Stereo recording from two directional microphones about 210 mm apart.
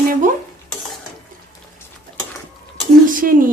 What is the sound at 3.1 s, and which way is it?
Dishes, 40° right (ahead or behind).